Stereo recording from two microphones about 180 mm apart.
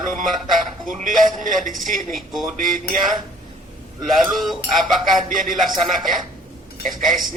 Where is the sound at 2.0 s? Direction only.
Centre (ahead or behind).